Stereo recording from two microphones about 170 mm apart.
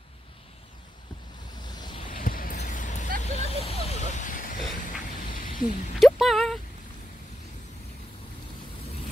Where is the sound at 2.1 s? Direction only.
55° left (ahead or behind).